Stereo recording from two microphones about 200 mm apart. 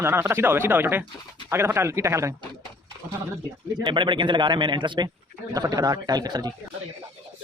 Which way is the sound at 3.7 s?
20° right (ahead or behind).